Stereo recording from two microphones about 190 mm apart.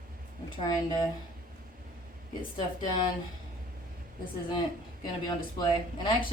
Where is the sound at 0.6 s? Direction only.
20° left (ahead or behind).